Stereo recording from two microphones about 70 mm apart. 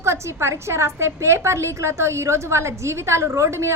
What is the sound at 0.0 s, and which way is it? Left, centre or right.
A woman's voice, right.